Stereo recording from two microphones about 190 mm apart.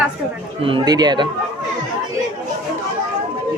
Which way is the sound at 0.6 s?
25° right (ahead or behind).